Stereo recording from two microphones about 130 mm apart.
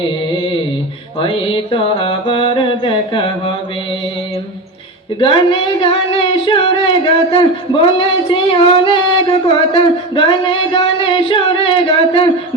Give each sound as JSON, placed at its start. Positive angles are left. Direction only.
{"t": 1.2, "sound": "music", "side_deg": 40}
{"t": 5.2, "sound": "singing", "side_deg": 40}
{"t": 9.5, "sound": "a sound", "side_deg": 40}